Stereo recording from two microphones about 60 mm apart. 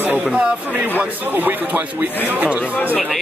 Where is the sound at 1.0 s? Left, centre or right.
Right.